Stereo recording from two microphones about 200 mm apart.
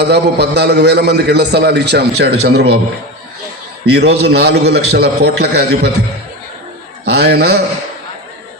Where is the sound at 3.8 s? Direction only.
55° right (ahead or behind).